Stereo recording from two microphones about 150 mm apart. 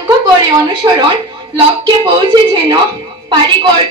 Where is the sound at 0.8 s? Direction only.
25° right (ahead or behind).